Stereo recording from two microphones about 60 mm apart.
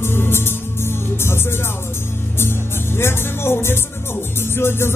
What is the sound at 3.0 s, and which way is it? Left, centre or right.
Music, left.